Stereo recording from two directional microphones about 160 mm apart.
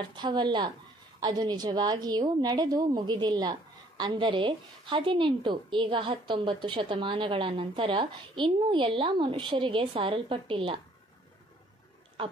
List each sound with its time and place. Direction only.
0.1 s a woman's voice: 30° right (ahead or behind)